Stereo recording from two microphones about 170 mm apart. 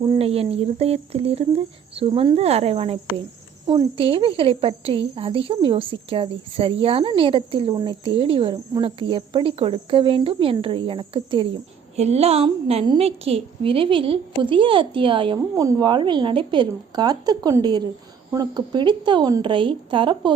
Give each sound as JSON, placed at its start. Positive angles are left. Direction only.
{"t": 0.0, "sound": "a woman's voice", "side_deg": -30}